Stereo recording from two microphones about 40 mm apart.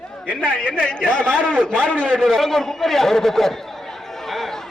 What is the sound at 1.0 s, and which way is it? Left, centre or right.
A man's voice, centre.